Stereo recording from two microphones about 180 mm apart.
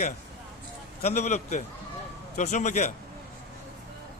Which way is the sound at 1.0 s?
40° left (ahead or behind).